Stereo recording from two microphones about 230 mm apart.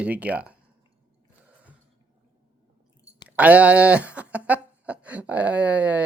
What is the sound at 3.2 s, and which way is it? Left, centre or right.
Speech, centre.